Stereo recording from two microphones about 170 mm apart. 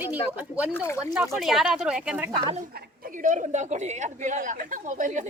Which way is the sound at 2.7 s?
60° right (ahead or behind).